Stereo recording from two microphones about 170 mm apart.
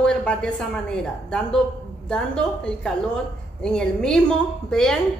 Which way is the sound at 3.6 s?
5° left (ahead or behind).